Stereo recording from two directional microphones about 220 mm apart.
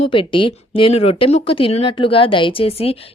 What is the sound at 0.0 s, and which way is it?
Speech, 25° left (ahead or behind).